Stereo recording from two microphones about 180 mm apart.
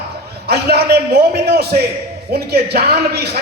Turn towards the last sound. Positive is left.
turn(degrees=-65)  # may be behind; listen again after turning